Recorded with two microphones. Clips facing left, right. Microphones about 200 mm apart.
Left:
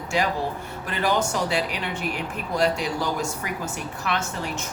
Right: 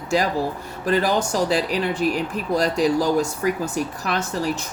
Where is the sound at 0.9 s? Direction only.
35° right (ahead or behind).